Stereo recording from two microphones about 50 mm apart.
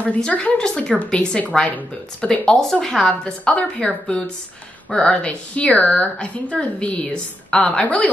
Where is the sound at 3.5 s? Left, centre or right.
Left.